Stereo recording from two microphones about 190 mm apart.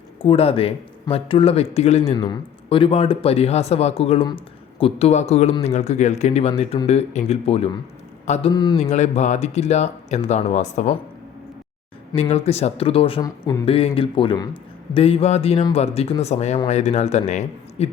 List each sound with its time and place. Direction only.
0.2 s a man's voice: 30° left (ahead or behind)
2.1 s a man's voice: 25° left (ahead or behind)
8.8 s a man's voice: 35° left (ahead or behind)
12.1 s a man's voice: 30° left (ahead or behind)
13.7 s a man's voice: 30° left (ahead or behind)